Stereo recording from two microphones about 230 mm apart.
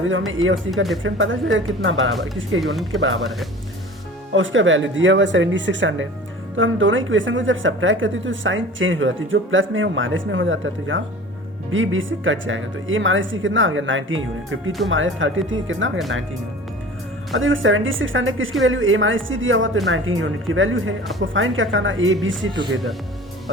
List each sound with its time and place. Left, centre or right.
0.3 s a woman's voice: right
2.6 s speech: centre
4.4 s a woman's voice: right
17.3 s a woman's voice: right